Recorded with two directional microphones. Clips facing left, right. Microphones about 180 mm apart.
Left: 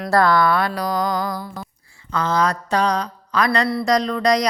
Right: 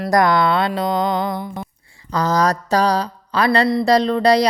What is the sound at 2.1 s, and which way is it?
Speech, 40° right (ahead or behind).